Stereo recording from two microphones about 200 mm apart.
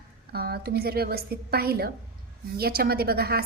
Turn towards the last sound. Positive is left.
turn(degrees=-50)  # may be behind; listen again after turning